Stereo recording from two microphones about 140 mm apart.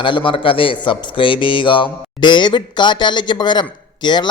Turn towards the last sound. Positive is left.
turn(degrees=30)  # may be behind; listen again after turning